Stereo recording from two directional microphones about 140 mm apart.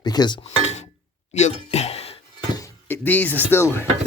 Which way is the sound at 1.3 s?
50° left (ahead or behind).